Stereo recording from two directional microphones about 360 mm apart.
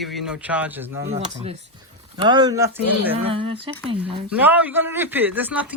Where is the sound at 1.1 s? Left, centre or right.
Centre.